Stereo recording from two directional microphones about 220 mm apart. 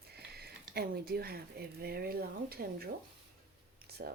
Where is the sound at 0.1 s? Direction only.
45° right (ahead or behind).